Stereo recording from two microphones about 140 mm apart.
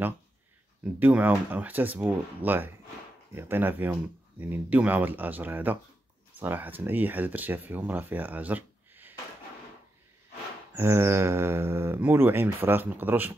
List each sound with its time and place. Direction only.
0.9 s speech: 10° right (ahead or behind)
10.7 s speech: 20° right (ahead or behind)